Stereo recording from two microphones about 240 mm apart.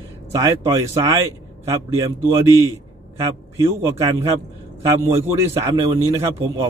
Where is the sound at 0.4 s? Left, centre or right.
Centre.